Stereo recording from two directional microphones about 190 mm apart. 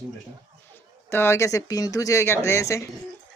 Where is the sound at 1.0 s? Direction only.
15° left (ahead or behind).